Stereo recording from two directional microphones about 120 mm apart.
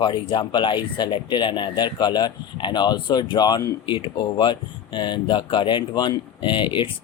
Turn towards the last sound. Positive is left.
turn(degrees=45)  # may be behind; listen again after turning